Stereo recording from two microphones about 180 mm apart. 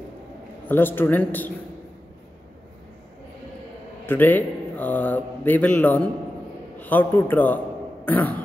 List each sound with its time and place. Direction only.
0.7 s a man's voice: 10° left (ahead or behind)
4.0 s a man's voice: 10° left (ahead or behind)